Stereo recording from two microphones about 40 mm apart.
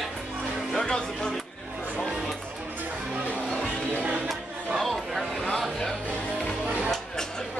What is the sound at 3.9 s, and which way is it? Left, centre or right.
Music, right.